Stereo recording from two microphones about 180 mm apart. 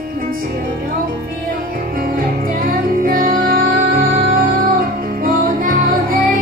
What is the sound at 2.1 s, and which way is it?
Music, 50° right (ahead or behind).